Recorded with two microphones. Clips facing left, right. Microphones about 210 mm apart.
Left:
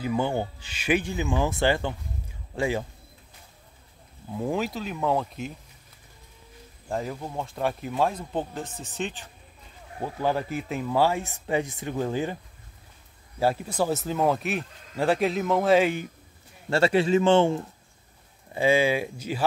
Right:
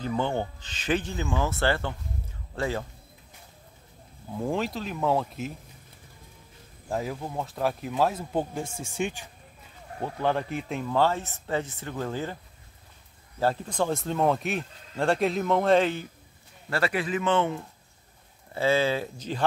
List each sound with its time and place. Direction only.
0.0 s a man's voice: 10° left (ahead or behind)
4.4 s speech: centre (ahead or behind)
6.9 s speech: 5° right (ahead or behind)
10.0 s speech: 5° left (ahead or behind)
13.4 s speech: 10° left (ahead or behind)
16.7 s speech: 25° left (ahead or behind)
18.5 s speech: 15° left (ahead or behind)